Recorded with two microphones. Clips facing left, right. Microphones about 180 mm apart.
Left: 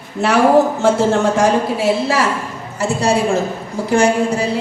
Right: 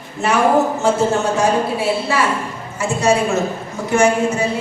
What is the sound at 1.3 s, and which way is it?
Speech, 90° left.